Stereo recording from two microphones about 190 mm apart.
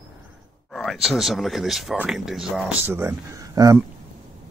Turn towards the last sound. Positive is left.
turn(degrees=-20)  # may be behind; listen again after turning